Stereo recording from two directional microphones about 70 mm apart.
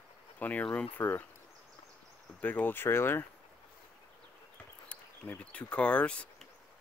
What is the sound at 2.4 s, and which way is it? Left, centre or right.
Speech, left.